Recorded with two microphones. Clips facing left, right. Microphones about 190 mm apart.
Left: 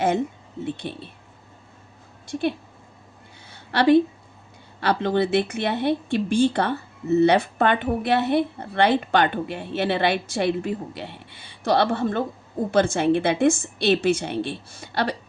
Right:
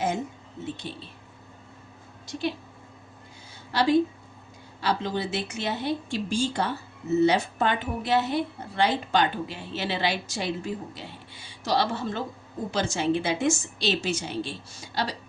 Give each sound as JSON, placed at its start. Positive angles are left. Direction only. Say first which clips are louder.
{"t": 0.6, "sound": "speech", "louder": "left 5 dB", "side_deg": 60}
{"t": 2.2, "sound": "speech", "louder": "left 5 dB", "side_deg": 55}
{"t": 3.5, "sound": "a sound", "louder": "left 5 dB", "side_deg": 60}
{"t": 4.8, "sound": "speech", "louder": "left 6 dB", "side_deg": 60}